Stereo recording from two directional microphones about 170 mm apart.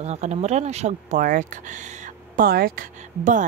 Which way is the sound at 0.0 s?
40° right (ahead or behind).